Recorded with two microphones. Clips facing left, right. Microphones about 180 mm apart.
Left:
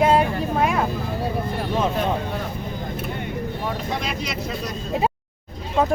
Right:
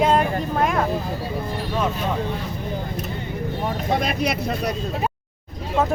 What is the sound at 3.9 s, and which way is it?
Speech, 60° right (ahead or behind).